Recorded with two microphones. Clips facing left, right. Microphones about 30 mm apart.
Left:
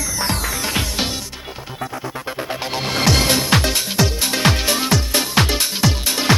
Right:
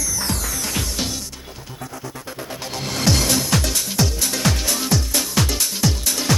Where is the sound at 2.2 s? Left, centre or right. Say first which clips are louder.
Left 7 dB; left.